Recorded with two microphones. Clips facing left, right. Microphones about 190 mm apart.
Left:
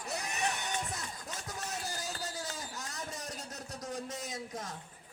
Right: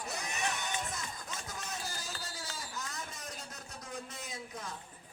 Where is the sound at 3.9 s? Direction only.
40° left (ahead or behind).